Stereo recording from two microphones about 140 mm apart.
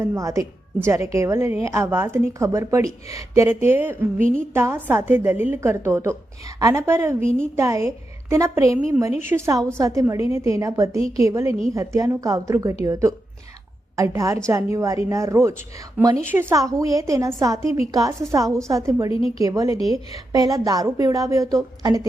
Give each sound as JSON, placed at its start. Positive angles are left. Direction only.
{"t": 0.0, "sound": "a woman's voice", "side_deg": -20}
{"t": 7.3, "sound": "a woman's voice", "side_deg": 5}
{"t": 7.5, "sound": "a woman's voice", "side_deg": -20}